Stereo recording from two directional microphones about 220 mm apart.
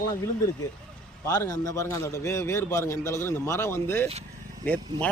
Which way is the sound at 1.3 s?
15° left (ahead or behind).